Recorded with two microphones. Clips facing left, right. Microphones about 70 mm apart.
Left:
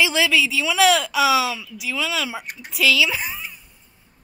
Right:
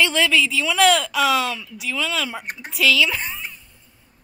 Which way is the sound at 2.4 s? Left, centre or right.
Right.